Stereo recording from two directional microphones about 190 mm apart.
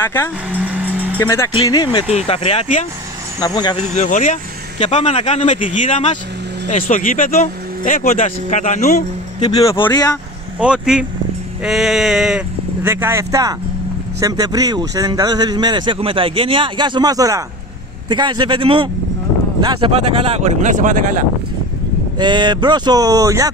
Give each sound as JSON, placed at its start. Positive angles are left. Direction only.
{"t": 0.0, "sound": "speech", "side_deg": 15}
{"t": 0.5, "sound": "vehicle", "side_deg": -10}
{"t": 1.1, "sound": "speech", "side_deg": 15}
{"t": 1.5, "sound": "speech", "side_deg": 25}
{"t": 3.3, "sound": "speech", "side_deg": 20}
{"t": 3.9, "sound": "speech", "side_deg": 40}
{"t": 9.4, "sound": "speech", "side_deg": 20}
{"t": 10.6, "sound": "speech", "side_deg": -5}
{"t": 22.2, "sound": "speech", "side_deg": -25}